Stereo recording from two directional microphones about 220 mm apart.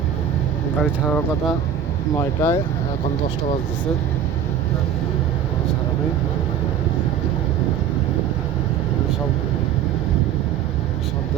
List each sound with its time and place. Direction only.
0.8 s speech: 5° left (ahead or behind)